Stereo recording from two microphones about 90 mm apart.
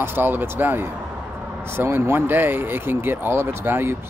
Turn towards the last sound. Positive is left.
turn(degrees=-25)  # may be behind; listen again after turning